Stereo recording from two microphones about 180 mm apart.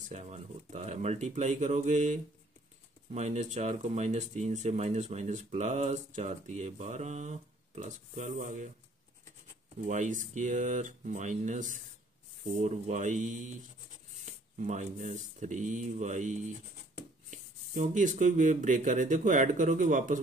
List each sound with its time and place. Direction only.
0.1 s speech: 35° right (ahead or behind)
9.8 s speech: 45° right (ahead or behind)
14.2 s a sound: 40° right (ahead or behind)
15.0 s speech: 40° right (ahead or behind)